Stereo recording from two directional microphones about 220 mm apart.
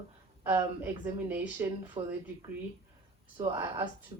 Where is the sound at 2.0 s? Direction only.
25° right (ahead or behind).